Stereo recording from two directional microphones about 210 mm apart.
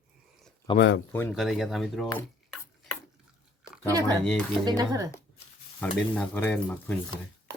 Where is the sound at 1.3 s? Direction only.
Centre (ahead or behind).